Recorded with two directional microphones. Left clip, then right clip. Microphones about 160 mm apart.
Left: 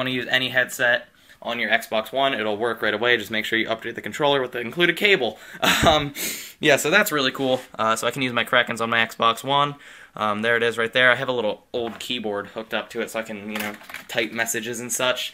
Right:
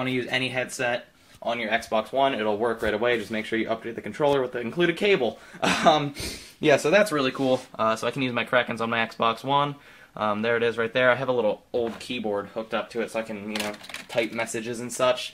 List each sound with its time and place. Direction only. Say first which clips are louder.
0.0 s speech: left 4 dB; 15° left (ahead or behind)